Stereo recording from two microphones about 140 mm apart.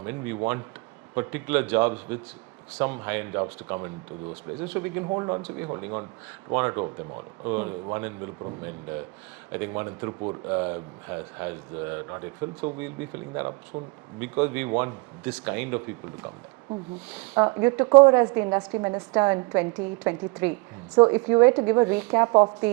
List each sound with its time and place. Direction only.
0.0 s speech: 15° right (ahead or behind)
5.0 s speech: 25° right (ahead or behind)
5.4 s speech: 10° right (ahead or behind)
13.7 s speech: 35° right (ahead or behind)
14.2 s speech: 10° right (ahead or behind)